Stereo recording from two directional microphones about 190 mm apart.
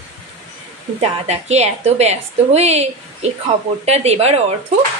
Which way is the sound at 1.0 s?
35° right (ahead or behind).